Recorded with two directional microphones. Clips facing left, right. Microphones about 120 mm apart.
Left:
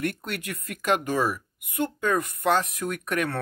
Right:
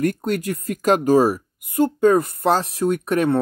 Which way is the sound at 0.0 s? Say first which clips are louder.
Right 9 dB; 35° right (ahead or behind).